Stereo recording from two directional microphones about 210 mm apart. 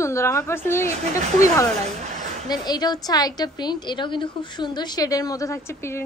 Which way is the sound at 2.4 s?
20° left (ahead or behind).